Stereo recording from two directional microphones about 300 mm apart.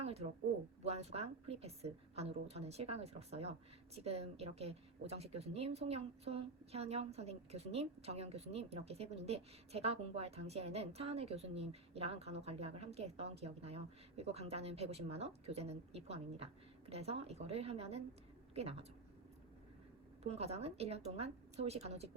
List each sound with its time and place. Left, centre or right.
0.0 s a sound: right
0.9 s a woman's voice: right
20.2 s a woman's voice: right